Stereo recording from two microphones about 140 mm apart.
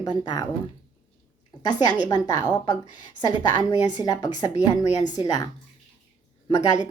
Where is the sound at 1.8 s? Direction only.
30° left (ahead or behind).